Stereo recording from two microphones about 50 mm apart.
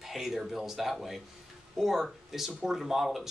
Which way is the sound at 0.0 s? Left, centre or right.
Centre.